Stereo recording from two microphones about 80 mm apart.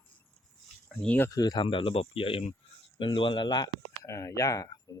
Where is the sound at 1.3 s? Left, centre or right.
Left.